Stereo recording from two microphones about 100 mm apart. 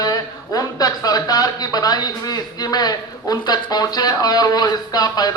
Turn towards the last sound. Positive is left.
turn(degrees=40)  # may be behind; listen again after turning